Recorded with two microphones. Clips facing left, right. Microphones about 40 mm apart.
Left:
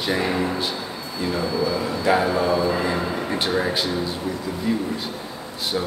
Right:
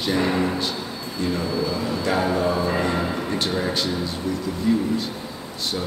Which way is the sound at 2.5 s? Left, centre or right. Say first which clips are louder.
Left 1 dB; right.